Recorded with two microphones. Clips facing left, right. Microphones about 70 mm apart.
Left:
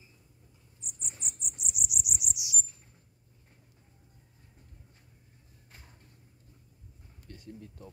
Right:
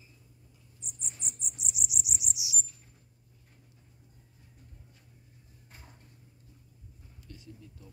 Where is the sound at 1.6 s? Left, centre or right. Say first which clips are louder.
Even; centre.